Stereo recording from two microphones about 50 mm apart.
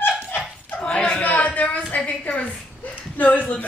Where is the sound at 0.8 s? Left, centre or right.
Centre.